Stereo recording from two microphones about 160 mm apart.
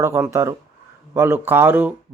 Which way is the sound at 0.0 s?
15° right (ahead or behind).